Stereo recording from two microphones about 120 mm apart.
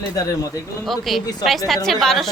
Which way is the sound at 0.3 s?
30° left (ahead or behind).